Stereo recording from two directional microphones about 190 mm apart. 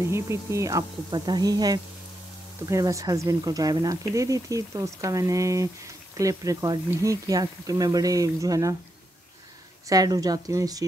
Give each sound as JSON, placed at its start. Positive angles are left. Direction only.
{"t": 0.0, "sound": "speech", "side_deg": -15}
{"t": 9.8, "sound": "speech", "side_deg": -20}